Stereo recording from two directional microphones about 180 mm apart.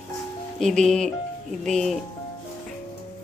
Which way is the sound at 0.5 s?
Centre (ahead or behind).